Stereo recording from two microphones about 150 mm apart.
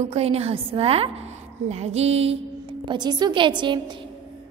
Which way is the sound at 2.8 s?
30° right (ahead or behind).